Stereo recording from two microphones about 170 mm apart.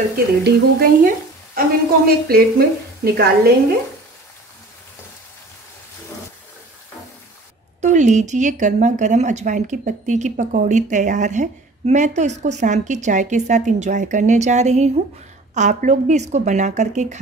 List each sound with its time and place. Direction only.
0.1 s a woman's voice: 65° right (ahead or behind)
7.8 s a woman's voice: 45° right (ahead or behind)